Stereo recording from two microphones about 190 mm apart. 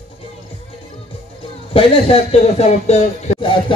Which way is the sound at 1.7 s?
30° left (ahead or behind).